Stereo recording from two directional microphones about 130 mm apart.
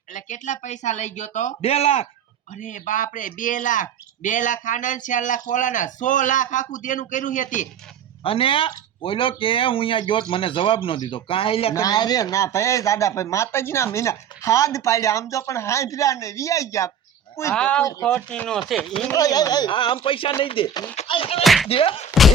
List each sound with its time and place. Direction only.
0.1 s speech: 70° left (ahead or behind); by 2.0 s 55° left (ahead or behind)
2.6 s speech: 75° left (ahead or behind)
8.2 s speech: 45° left (ahead or behind)
11.7 s speech: 30° left (ahead or behind)
17.5 s speech: 10° left (ahead or behind)
19.1 s speech: 30° left (ahead or behind); by 21.4 s 50° left (ahead or behind)
21.4 s slap: centre (ahead or behind)
21.7 s speech: 45° left (ahead or behind)